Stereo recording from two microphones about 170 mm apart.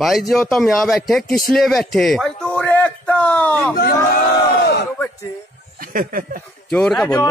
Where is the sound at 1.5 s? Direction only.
Centre (ahead or behind).